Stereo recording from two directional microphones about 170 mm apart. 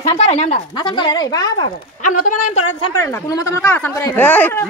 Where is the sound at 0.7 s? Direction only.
25° left (ahead or behind).